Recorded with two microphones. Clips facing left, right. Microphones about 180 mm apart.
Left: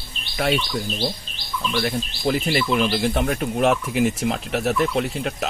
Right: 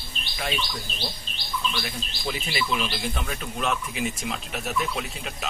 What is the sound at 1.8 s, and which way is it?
Speech, 55° left (ahead or behind).